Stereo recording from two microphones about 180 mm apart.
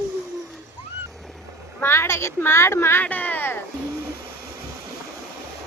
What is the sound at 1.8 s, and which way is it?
Speech, 15° left (ahead or behind).